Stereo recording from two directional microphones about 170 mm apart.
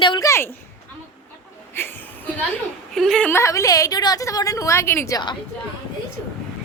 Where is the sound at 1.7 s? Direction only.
15° left (ahead or behind).